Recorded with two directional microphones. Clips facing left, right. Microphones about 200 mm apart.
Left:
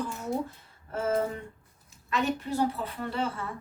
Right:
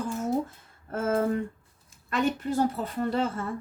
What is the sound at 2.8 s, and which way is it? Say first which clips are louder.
Speech: right 5 dB; 45° right (ahead or behind).